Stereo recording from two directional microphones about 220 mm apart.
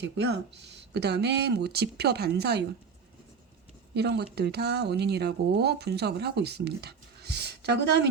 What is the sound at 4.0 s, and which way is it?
Speech, 50° right (ahead or behind).